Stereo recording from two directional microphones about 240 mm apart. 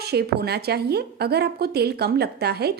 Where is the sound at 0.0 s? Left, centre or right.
Right.